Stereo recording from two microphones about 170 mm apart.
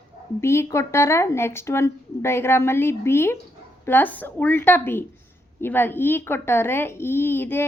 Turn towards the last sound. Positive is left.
turn(degrees=15)  # may be behind; listen again after turning